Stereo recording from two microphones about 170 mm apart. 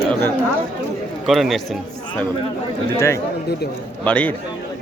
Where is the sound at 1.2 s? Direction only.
Centre (ahead or behind).